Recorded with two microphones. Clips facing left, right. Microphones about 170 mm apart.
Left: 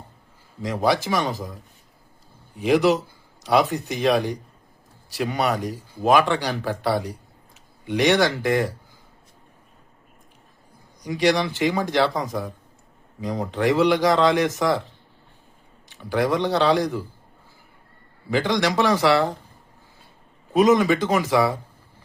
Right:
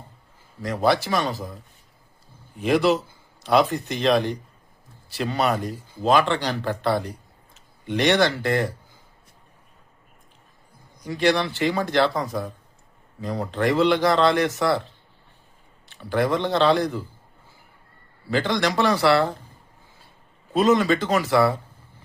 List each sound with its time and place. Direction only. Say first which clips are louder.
0.6 s speech: even; 15° left (ahead or behind)
2.6 s speech: left 1 dB; 15° left (ahead or behind)
11.0 s speech: left 1 dB; 15° left (ahead or behind)
18.3 s speech: left 1 dB; 15° left (ahead or behind)
20.5 s speech: left 2 dB; 15° left (ahead or behind)